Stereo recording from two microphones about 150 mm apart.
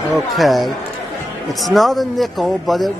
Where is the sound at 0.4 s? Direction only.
Centre (ahead or behind).